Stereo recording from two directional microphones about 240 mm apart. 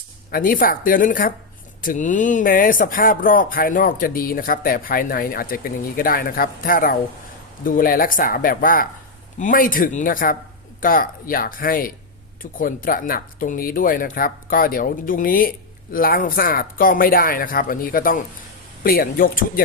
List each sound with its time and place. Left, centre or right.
0.3 s speech: left